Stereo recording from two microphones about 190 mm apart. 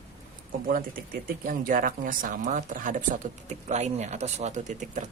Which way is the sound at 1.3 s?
45° right (ahead or behind).